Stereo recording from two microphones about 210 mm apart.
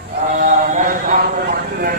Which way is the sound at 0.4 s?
40° right (ahead or behind).